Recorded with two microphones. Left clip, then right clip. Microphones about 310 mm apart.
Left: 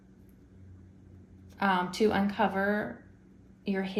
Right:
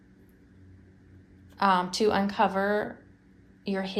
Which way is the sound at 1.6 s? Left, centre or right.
Centre.